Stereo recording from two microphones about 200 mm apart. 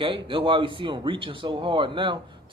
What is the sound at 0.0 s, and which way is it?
Speech, 25° right (ahead or behind).